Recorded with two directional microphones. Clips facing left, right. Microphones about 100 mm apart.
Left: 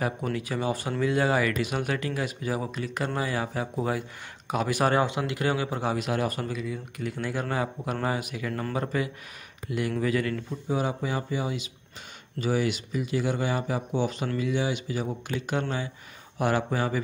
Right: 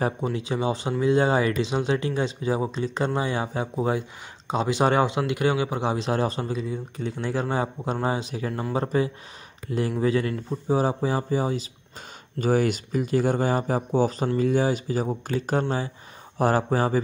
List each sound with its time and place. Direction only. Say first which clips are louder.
0.0 s speech: right 3 dB; 25° right (ahead or behind)